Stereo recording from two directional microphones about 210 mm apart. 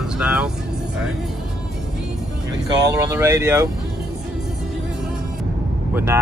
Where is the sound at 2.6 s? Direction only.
15° right (ahead or behind).